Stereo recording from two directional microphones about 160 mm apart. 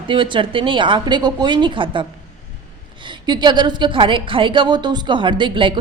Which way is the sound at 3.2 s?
25° right (ahead or behind).